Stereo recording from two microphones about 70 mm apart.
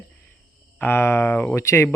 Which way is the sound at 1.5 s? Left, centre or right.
Left.